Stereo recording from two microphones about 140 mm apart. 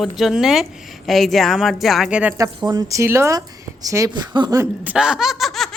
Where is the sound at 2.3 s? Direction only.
25° right (ahead or behind).